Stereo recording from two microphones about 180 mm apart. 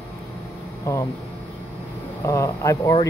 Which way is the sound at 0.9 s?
15° left (ahead or behind).